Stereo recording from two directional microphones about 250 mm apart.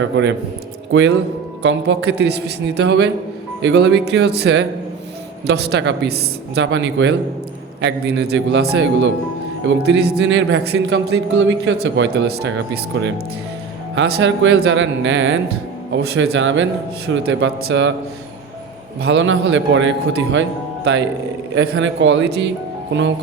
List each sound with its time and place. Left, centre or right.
0.0 s a man's voice: right
19.0 s a man's voice: right